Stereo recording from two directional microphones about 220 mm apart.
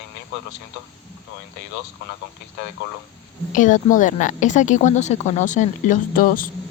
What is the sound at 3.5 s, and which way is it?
A woman's voice, 35° left (ahead or behind).